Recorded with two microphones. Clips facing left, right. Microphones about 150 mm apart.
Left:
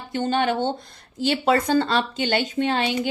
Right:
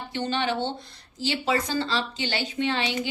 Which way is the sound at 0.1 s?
45° left (ahead or behind).